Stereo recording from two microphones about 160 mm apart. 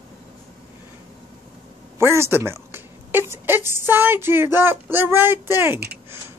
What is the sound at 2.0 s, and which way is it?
A child's voice, 15° right (ahead or behind).